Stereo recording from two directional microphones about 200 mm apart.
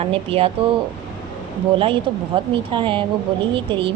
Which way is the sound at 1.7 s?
25° right (ahead or behind).